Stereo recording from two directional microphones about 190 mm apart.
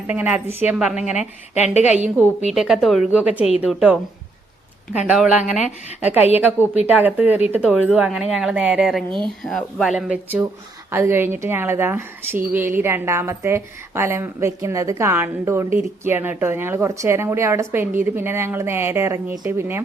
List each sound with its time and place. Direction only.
0.1 s speech: 10° right (ahead or behind)
1.6 s a woman's voice: 35° left (ahead or behind)
2.5 s a woman's voice: centre (ahead or behind)
4.9 s a woman's voice: 5° right (ahead or behind)